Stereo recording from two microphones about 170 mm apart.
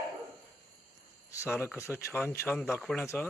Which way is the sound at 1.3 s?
15° left (ahead or behind).